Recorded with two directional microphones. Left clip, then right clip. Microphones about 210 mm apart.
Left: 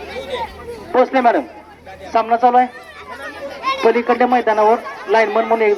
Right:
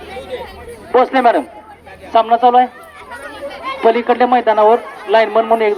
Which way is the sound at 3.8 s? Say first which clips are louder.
Right 3 dB; 50° right (ahead or behind).